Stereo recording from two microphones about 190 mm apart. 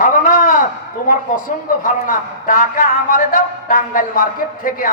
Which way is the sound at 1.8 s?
45° left (ahead or behind).